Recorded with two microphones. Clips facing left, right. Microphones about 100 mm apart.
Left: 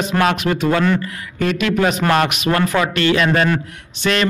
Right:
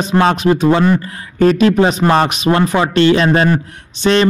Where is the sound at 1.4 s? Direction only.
35° right (ahead or behind).